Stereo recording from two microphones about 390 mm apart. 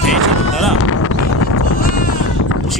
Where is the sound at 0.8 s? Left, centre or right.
Left.